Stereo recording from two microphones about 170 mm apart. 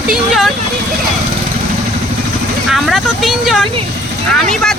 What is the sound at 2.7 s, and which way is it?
Speech, centre (ahead or behind).